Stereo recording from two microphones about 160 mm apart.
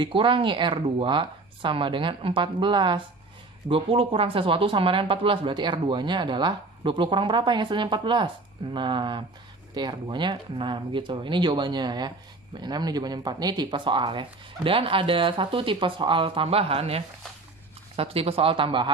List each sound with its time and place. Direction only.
0.0 s speech: 30° right (ahead or behind)